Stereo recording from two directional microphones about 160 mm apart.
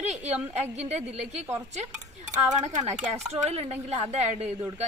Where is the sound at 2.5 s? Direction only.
45° right (ahead or behind).